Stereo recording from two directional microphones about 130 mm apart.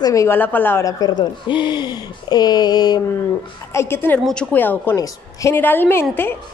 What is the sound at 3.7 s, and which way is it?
A woman's voice, 20° left (ahead or behind).